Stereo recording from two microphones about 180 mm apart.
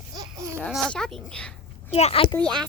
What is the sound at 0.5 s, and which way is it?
A woman's voice, 5° left (ahead or behind).